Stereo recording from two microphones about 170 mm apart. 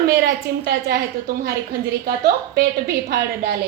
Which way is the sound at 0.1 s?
65° right (ahead or behind).